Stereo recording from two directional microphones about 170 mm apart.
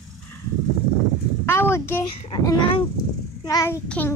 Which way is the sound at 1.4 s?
15° left (ahead or behind).